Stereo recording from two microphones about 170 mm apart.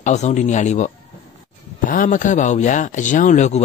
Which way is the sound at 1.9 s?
50° left (ahead or behind).